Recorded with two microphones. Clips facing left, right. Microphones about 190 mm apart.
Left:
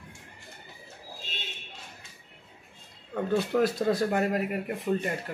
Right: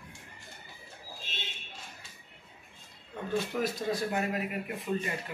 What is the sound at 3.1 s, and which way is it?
Speech, 65° left (ahead or behind).